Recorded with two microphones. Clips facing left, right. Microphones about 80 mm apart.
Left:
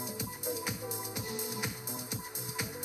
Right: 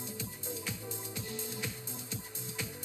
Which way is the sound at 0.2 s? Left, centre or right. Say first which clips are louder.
Left 5 dB; centre.